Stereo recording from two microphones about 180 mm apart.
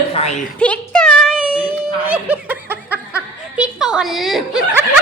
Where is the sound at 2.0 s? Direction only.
10° right (ahead or behind).